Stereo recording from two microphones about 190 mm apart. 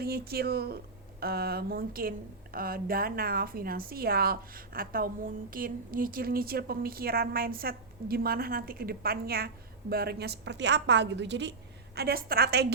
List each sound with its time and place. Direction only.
0.0 s a woman's voice: 55° right (ahead or behind)
11.9 s a woman's voice: 55° right (ahead or behind)